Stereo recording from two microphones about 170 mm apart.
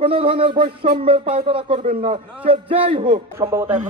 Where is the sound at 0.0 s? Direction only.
30° right (ahead or behind).